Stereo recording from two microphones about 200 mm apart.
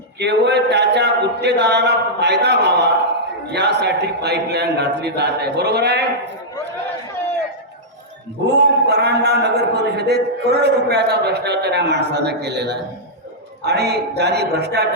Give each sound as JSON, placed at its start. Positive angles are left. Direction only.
{"t": 0.2, "sound": "a man's voice", "side_deg": -60}
{"t": 8.4, "sound": "a man's voice", "side_deg": -55}